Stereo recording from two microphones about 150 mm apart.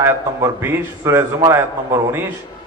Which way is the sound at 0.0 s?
15° right (ahead or behind).